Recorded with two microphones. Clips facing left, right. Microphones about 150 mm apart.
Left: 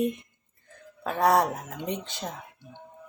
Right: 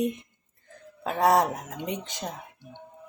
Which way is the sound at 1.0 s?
20° right (ahead or behind).